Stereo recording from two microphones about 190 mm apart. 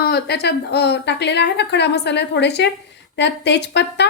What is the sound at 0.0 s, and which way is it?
A woman's voice, 55° left (ahead or behind).